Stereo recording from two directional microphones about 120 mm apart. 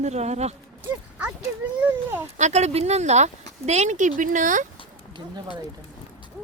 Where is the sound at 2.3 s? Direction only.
70° right (ahead or behind); by 4.6 s 90° right.